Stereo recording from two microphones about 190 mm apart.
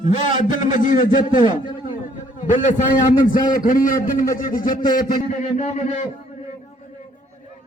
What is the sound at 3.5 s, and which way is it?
A man's voice, 45° left (ahead or behind).